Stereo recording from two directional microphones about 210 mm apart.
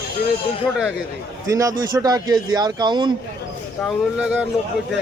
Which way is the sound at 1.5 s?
15° right (ahead or behind).